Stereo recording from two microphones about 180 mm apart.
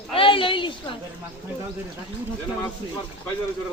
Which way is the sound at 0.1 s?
30° left (ahead or behind).